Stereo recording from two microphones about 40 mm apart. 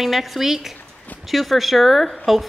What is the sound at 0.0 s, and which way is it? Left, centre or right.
A woman's voice, centre.